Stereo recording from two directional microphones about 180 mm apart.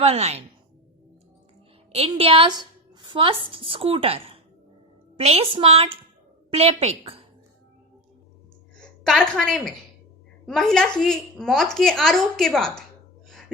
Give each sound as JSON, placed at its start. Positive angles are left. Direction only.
{"t": 0.0, "sound": "a woman's voice", "side_deg": -35}
{"t": 2.0, "sound": "speech", "side_deg": -30}
{"t": 3.0, "sound": "music", "side_deg": -25}
{"t": 3.5, "sound": "speech", "side_deg": -30}
{"t": 8.8, "sound": "a woman's voice", "side_deg": 5}